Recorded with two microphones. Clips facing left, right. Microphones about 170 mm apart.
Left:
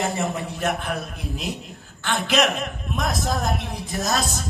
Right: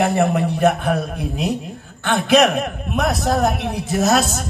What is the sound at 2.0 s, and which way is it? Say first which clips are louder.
A man's voice: right 7 dB; 60° right (ahead or behind).